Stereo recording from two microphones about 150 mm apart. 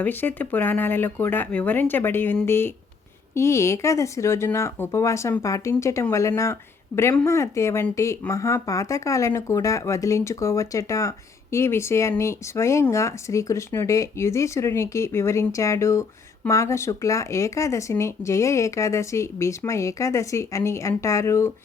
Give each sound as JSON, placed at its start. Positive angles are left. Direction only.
{"t": 0.0, "sound": "speech", "side_deg": 15}